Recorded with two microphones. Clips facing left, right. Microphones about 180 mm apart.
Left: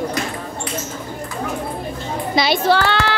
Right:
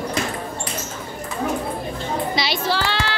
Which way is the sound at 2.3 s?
50° left (ahead or behind).